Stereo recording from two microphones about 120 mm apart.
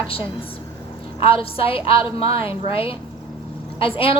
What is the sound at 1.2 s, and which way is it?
A woman's voice, 50° left (ahead or behind).